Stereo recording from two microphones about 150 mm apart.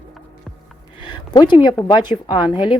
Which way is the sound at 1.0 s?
30° left (ahead or behind).